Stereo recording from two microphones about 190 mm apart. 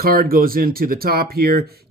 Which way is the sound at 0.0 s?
50° right (ahead or behind).